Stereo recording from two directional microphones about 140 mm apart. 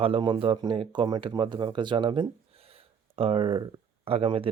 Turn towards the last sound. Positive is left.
turn(degrees=-40)  # may be behind; listen again after turning